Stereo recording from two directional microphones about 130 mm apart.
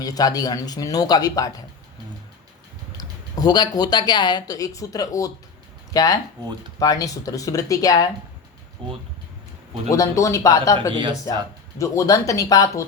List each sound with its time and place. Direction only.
0.0 s speech: 30° left (ahead or behind)
3.0 s speech: 30° left (ahead or behind)
9.9 s speech: 25° left (ahead or behind)
10.9 s speech: 35° right (ahead or behind)
11.8 s speech: 25° left (ahead or behind)